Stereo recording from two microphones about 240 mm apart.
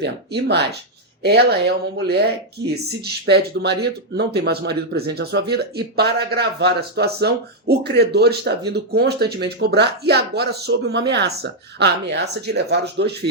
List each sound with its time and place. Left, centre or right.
0.0 s speech: right